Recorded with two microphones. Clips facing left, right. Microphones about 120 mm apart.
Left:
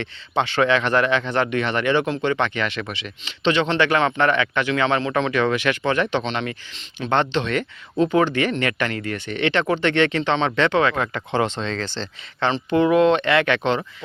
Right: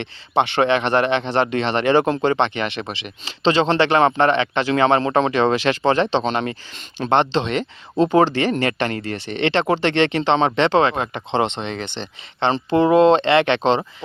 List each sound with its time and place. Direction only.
0.0 s speech: 25° right (ahead or behind)
2.4 s speech: 25° right (ahead or behind)
12.7 s speech: 30° right (ahead or behind)